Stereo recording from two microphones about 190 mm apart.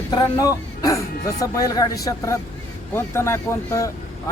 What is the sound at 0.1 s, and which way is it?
Speech, 20° left (ahead or behind).